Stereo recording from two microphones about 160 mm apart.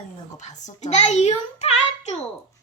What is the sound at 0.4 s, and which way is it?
A child's voice, 45° left (ahead or behind).